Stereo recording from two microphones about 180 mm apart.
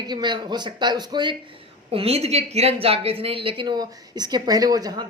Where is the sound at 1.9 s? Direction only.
35° right (ahead or behind).